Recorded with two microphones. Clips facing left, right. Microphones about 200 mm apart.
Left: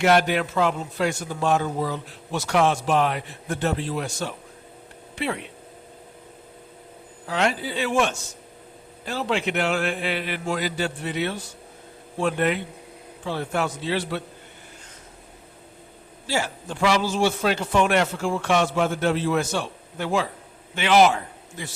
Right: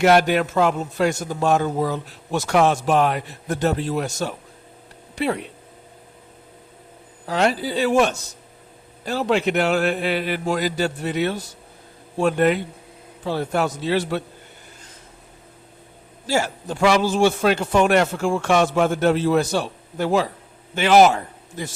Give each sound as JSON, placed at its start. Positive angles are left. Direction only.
{"t": 0.0, "sound": "a man's voice", "side_deg": -45}
{"t": 7.3, "sound": "a man's voice", "side_deg": -40}
{"t": 16.2, "sound": "a man's voice", "side_deg": -45}